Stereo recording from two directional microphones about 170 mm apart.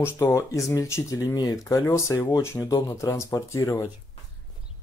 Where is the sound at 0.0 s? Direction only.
15° left (ahead or behind).